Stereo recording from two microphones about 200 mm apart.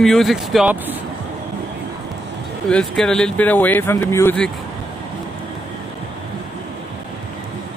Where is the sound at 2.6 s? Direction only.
Centre (ahead or behind).